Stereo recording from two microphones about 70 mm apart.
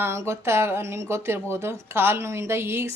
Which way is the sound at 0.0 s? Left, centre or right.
Right.